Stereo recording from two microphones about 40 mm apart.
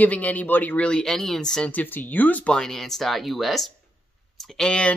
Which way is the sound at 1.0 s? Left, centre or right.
Centre.